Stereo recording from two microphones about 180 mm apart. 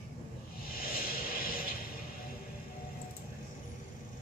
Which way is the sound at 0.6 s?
55° left (ahead or behind).